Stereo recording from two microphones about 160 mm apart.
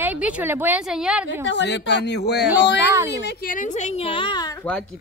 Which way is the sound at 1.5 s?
90° left.